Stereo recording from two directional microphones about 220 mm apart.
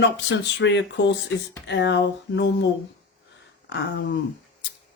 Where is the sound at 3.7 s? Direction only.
50° left (ahead or behind).